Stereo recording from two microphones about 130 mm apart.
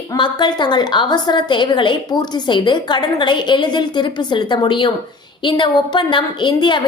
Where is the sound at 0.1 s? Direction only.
35° left (ahead or behind).